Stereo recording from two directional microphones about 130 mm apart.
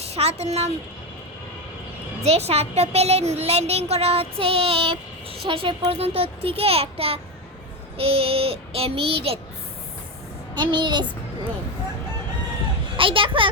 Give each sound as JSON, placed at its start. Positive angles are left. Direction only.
{"t": 0.1, "sound": "speech", "side_deg": -55}
{"t": 2.2, "sound": "a woman's voice", "side_deg": -55}
{"t": 10.5, "sound": "a child's voice", "side_deg": -35}
{"t": 13.0, "sound": "a child's voice", "side_deg": -40}